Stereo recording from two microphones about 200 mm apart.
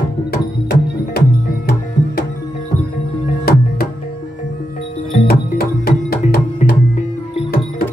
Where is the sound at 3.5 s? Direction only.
50° left (ahead or behind).